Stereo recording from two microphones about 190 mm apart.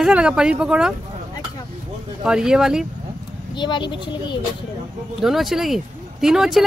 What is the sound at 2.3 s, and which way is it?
Speech, 5° right (ahead or behind).